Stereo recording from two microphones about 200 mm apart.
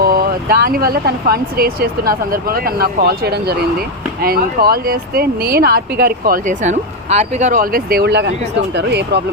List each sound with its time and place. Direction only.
0.0 s speech: 45° right (ahead or behind)